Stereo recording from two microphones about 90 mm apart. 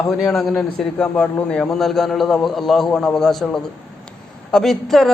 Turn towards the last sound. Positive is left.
turn(degrees=0)  # may be behind; listen again after turning